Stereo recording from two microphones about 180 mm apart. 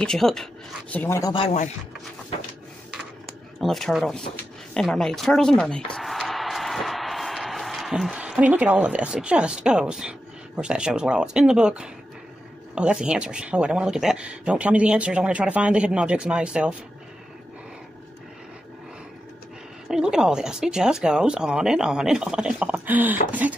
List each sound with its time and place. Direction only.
0.0 s speech: 5° left (ahead or behind)
1.3 s speech: 35° left (ahead or behind)
3.6 s speech: centre (ahead or behind)
19.9 s speech: 5° right (ahead or behind)